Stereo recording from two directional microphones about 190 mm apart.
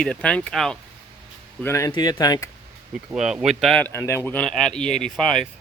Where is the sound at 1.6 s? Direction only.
15° left (ahead or behind).